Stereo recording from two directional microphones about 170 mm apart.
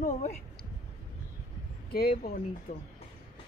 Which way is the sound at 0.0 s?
45° left (ahead or behind).